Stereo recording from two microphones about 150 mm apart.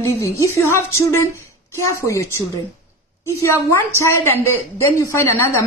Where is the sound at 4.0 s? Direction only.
20° left (ahead or behind).